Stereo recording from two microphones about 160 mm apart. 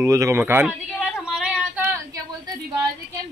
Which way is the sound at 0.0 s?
20° right (ahead or behind).